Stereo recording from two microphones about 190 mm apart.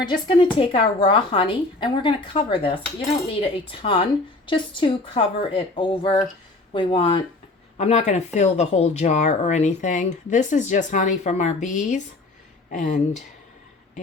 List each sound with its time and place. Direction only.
0.0 s a woman's voice: 25° left (ahead or behind); by 13.0 s 40° left (ahead or behind)